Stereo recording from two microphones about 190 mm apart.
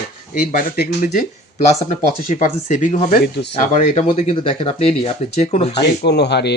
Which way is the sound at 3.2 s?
60° left (ahead or behind).